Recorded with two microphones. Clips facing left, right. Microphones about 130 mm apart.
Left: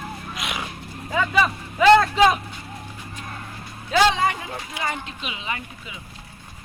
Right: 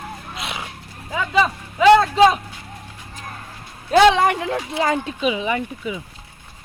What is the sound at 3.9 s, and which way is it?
Speech, 60° right (ahead or behind).